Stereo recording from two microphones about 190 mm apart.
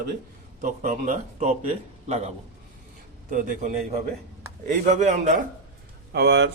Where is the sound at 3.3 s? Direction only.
45° right (ahead or behind).